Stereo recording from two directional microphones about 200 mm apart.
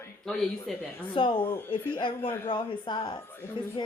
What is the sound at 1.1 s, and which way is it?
Speech, 25° left (ahead or behind).